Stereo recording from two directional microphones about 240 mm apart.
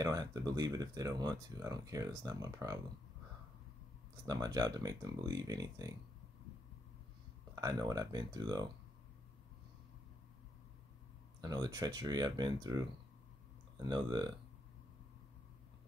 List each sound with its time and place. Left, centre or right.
0.0 s speech: centre
4.3 s speech: centre
7.5 s speech: centre
11.4 s speech: centre
13.8 s speech: centre